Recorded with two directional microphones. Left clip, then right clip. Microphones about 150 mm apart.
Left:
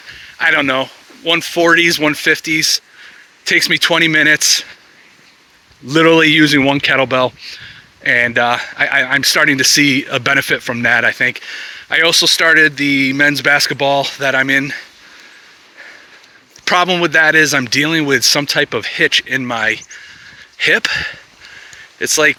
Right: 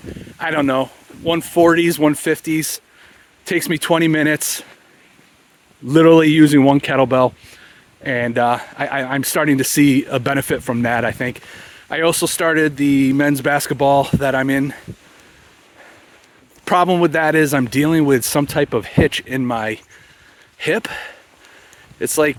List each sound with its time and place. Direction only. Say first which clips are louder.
0.3 s speech: left 5 dB; 35° right (ahead or behind)
5.9 s speech: left 1 dB; 40° right (ahead or behind)
16.6 s speech: left 1 dB; 45° right (ahead or behind)